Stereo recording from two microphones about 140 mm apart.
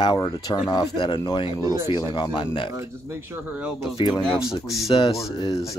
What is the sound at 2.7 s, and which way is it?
Speech, 20° right (ahead or behind).